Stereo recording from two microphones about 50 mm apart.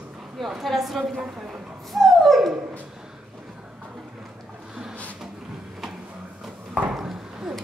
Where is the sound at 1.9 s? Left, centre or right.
Centre.